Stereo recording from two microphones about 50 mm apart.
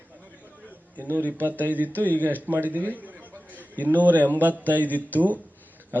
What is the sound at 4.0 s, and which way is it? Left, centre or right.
Speech, right.